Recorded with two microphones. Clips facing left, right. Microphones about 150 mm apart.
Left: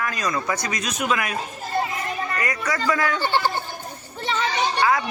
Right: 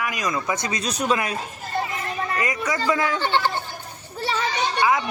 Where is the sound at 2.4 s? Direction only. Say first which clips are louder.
Right 2 dB; 20° right (ahead or behind).